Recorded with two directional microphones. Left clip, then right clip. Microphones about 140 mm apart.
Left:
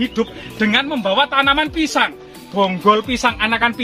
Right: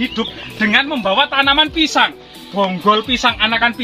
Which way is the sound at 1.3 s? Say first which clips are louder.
Right 2 dB; 30° left (ahead or behind).